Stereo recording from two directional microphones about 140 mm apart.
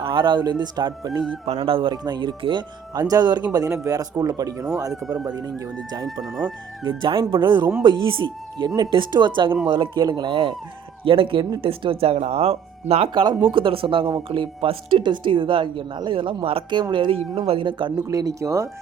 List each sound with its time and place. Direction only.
0.0 s speech: 35° right (ahead or behind)
18.1 s speech: 25° right (ahead or behind)